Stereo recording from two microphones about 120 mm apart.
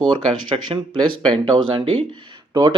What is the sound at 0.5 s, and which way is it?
Speech, 45° right (ahead or behind).